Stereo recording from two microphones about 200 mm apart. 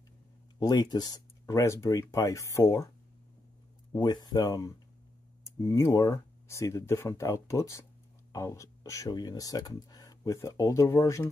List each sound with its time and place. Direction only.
0.6 s speech: 20° left (ahead or behind)
3.9 s speech: 20° left (ahead or behind)